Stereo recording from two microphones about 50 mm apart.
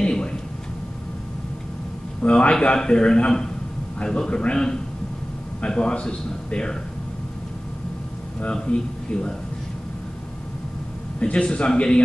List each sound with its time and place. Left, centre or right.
0.0 s a sound: centre
2.2 s a man's voice: left
8.5 s a man's voice: centre
11.1 s a man's voice: left